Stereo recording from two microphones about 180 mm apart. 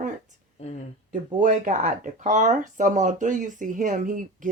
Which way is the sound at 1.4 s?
45° right (ahead or behind).